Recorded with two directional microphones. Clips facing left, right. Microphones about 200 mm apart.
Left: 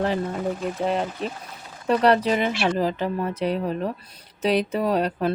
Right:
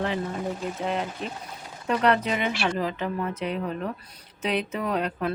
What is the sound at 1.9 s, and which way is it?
Speech, 35° left (ahead or behind).